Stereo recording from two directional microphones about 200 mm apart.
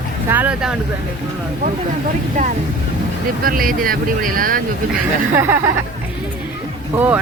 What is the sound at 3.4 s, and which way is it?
Speech, 45° right (ahead or behind).